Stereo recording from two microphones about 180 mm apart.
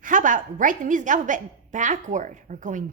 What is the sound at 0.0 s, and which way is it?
A woman's voice, 45° right (ahead or behind).